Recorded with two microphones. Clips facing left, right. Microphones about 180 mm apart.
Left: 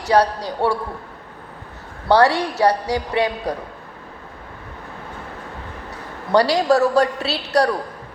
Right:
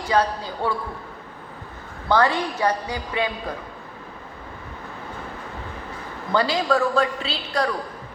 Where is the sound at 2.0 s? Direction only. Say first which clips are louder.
Left 5 dB; 75° left (ahead or behind).